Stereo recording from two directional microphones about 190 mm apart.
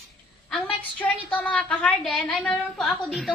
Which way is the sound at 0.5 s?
5° left (ahead or behind).